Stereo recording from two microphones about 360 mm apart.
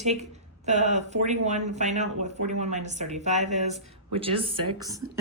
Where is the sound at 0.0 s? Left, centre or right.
Centre.